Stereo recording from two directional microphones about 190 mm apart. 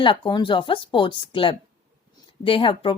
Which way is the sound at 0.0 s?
25° left (ahead or behind).